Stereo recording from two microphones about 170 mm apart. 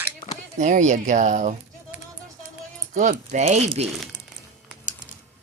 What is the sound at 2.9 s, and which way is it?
Speech, 45° right (ahead or behind).